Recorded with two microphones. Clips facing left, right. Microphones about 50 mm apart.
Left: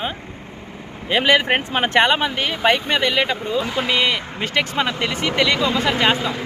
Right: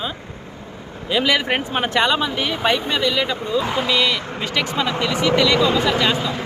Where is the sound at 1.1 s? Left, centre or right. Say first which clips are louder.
Left 2 dB; left.